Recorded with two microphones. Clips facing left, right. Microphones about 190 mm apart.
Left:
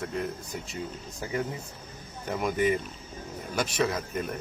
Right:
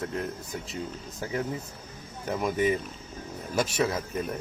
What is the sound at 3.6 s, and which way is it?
Speech, 25° right (ahead or behind).